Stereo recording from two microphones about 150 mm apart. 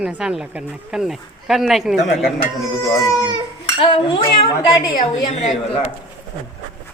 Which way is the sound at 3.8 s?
35° left (ahead or behind).